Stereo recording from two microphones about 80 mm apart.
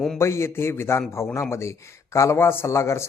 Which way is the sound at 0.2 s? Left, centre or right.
Left.